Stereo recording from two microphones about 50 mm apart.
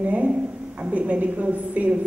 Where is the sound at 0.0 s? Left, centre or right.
Right.